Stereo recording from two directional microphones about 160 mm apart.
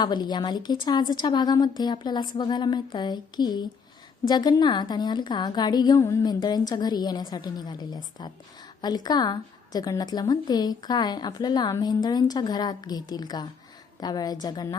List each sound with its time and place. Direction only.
0.0 s a woman's voice: 25° left (ahead or behind)